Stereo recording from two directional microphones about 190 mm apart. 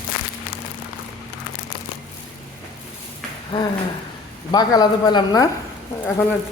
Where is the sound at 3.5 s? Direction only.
25° left (ahead or behind).